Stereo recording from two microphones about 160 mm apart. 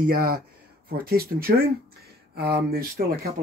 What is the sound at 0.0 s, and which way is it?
Speech, 65° right (ahead or behind).